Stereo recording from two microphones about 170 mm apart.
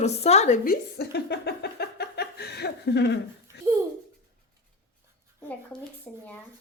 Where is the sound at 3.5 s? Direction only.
80° left.